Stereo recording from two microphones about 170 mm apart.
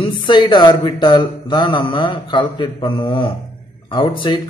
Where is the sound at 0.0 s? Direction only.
30° left (ahead or behind).